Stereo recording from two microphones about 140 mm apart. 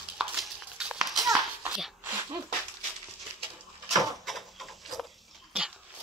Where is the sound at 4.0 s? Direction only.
Centre (ahead or behind).